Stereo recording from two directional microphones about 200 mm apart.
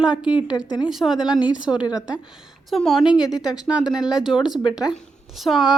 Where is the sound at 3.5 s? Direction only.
5° right (ahead or behind).